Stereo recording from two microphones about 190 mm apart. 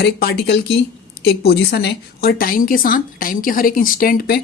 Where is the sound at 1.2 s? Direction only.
55° left (ahead or behind).